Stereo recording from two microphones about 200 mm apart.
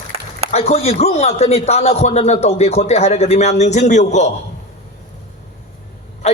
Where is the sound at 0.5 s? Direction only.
30° left (ahead or behind).